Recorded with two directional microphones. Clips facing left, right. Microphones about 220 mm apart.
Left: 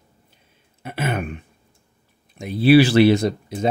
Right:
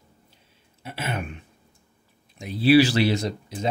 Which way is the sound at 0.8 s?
55° left (ahead or behind).